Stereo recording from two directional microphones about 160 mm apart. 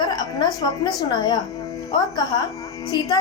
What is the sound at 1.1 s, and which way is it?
Speech, 25° left (ahead or behind).